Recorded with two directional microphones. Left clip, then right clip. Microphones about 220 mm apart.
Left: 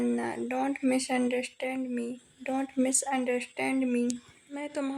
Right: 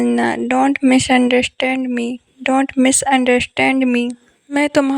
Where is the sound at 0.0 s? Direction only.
45° right (ahead or behind).